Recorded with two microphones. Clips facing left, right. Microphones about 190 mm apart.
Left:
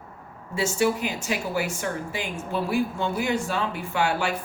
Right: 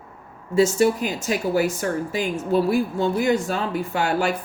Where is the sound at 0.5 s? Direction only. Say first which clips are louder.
Right 6 dB; 40° right (ahead or behind).